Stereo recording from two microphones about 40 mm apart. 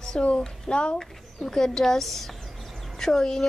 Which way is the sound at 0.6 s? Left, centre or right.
Left.